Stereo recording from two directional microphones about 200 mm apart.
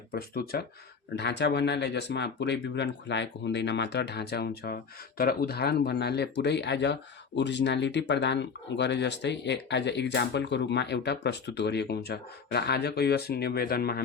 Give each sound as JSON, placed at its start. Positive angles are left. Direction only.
{"t": 0.1, "sound": "speech", "side_deg": 50}